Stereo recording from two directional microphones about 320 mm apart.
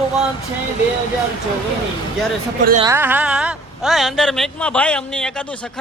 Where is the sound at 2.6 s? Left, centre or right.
Right.